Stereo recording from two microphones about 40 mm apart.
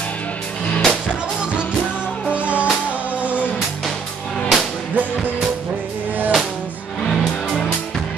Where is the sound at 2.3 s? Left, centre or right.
Right.